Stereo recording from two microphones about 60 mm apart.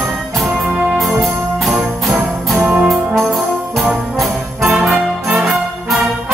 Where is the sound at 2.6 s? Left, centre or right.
Right.